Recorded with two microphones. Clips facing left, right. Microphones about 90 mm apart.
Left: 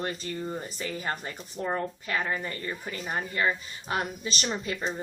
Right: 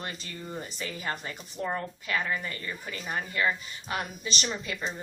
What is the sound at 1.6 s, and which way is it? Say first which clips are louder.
Speech: left 2 dB; 20° left (ahead or behind).